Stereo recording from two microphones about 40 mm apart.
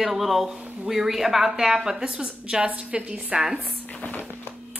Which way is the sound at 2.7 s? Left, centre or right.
Right.